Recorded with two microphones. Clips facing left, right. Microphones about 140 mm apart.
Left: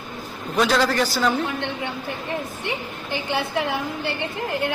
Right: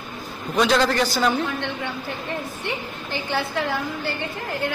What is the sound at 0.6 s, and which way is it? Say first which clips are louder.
Speech: right 1 dB; centre (ahead or behind).